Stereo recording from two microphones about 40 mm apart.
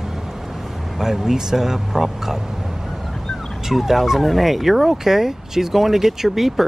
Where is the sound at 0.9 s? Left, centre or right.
Centre.